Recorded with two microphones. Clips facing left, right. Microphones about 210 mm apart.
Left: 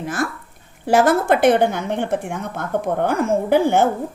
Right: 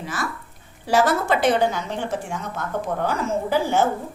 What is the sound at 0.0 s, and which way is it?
A woman's voice, 50° left (ahead or behind).